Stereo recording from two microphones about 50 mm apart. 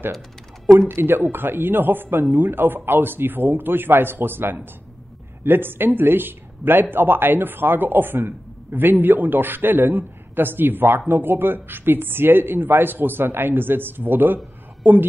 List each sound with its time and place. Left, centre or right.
0.7 s a man's voice: right